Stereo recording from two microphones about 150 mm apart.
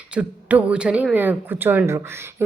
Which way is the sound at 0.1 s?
10° right (ahead or behind).